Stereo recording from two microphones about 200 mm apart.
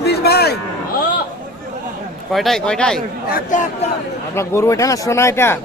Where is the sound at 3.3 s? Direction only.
40° left (ahead or behind).